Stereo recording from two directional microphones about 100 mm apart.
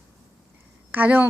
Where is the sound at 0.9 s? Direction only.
15° right (ahead or behind).